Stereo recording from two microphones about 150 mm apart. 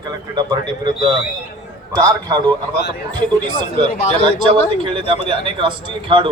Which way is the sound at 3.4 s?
50° left (ahead or behind).